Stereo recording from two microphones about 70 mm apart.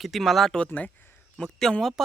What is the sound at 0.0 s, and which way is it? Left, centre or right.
Speech, centre.